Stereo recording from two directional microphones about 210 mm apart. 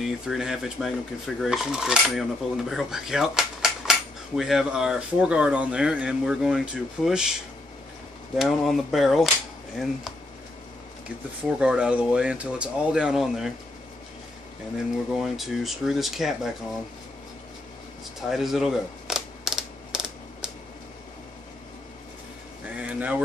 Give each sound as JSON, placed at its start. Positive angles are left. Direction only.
{"t": 0.0, "sound": "dishes", "side_deg": 0}
{"t": 11.6, "sound": "dishes", "side_deg": -5}
{"t": 15.1, "sound": "dishes", "side_deg": 0}
{"t": 18.3, "sound": "typewriter", "side_deg": 0}
{"t": 22.8, "sound": "a sound", "side_deg": -5}